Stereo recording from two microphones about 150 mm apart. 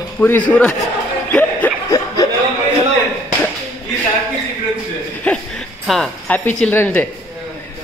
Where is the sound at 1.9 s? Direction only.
25° left (ahead or behind).